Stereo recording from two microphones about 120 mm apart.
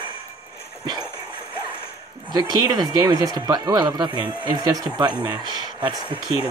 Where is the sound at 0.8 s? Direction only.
35° right (ahead or behind).